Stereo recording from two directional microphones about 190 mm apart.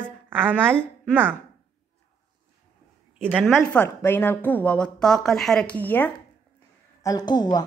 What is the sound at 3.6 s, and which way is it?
Speech, 10° left (ahead or behind).